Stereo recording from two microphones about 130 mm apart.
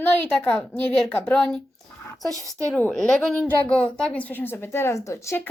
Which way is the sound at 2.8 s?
10° left (ahead or behind).